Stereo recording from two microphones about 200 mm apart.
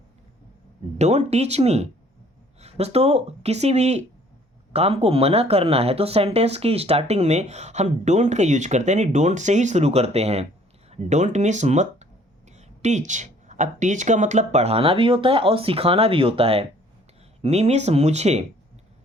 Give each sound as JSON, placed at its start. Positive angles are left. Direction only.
{"t": 0.9, "sound": "a woman's voice", "side_deg": -35}